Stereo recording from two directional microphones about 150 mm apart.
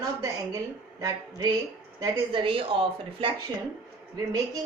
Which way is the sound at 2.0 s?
35° right (ahead or behind).